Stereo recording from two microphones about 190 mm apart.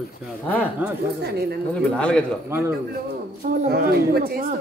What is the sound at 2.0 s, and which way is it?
Speech, 5° left (ahead or behind).